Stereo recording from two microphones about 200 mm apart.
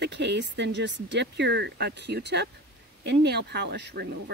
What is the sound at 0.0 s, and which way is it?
Speech, 60° right (ahead or behind).